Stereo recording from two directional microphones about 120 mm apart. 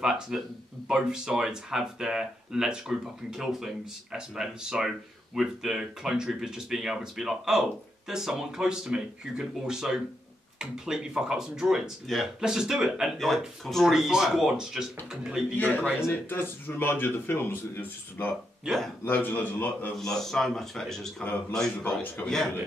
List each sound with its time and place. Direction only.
0.0 s speech: 5° right (ahead or behind)
15.5 s speech: 15° left (ahead or behind)
18.7 s speech: 5° right (ahead or behind)
19.0 s speech: 15° left (ahead or behind)
20.0 s speech: 5° left (ahead or behind)